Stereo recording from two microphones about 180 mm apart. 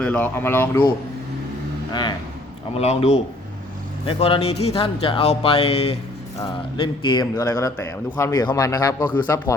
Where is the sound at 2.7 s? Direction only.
35° left (ahead or behind).